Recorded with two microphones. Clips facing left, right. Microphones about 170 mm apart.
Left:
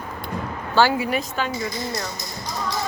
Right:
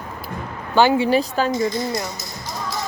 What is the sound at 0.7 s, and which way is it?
Speech, 25° right (ahead or behind).